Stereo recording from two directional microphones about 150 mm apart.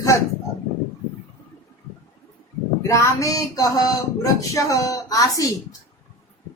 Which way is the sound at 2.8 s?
20° left (ahead or behind).